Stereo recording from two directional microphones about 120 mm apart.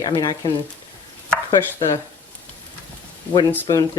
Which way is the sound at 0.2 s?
35° left (ahead or behind).